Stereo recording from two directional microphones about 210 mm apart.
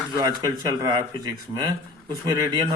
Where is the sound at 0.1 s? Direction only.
20° right (ahead or behind).